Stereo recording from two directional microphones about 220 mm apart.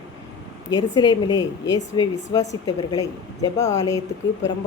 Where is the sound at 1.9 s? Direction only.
15° left (ahead or behind).